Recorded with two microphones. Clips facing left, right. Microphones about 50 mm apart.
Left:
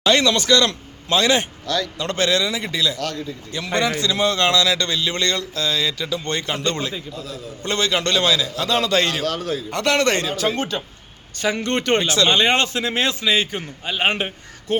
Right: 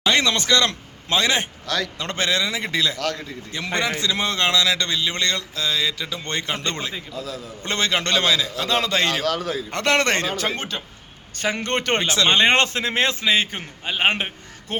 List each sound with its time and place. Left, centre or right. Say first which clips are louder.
0.0 s a man's voice: left 3 dB; right
1.6 s a man's voice: left 2 dB; right
2.0 s a man's voice: left 4 dB; right
3.5 s a man's voice: left 2 dB; right
11.3 s a man's voice: left 2 dB; right